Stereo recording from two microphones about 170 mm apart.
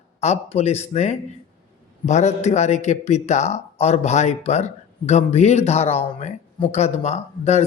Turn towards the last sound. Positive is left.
turn(degrees=40)  # may be behind; listen again after turning